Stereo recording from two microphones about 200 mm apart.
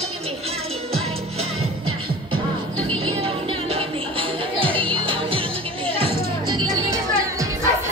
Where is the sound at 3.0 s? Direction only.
25° right (ahead or behind).